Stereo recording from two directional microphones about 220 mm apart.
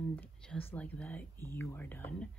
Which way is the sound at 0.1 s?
10° left (ahead or behind).